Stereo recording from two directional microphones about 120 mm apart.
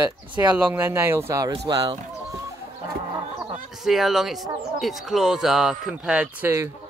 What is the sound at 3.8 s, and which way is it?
Speech, centre (ahead or behind).